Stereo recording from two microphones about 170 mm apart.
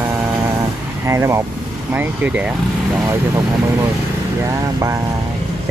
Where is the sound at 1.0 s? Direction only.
15° right (ahead or behind).